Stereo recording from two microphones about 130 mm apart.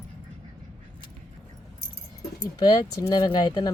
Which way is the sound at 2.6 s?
30° left (ahead or behind).